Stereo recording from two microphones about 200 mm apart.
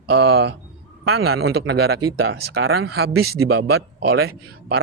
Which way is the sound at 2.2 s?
90° right.